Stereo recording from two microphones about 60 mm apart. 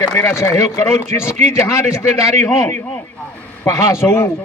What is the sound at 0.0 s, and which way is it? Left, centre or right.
Speech, left.